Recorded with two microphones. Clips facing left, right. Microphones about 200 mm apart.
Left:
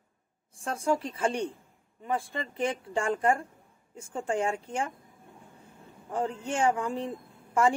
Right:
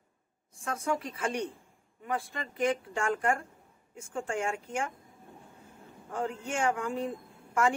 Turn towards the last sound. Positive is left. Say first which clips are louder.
# left 3 dB
turn(degrees=35)  # may be behind; listen again after turning